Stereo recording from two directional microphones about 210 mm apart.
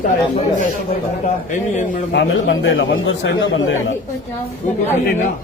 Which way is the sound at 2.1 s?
55° left (ahead or behind).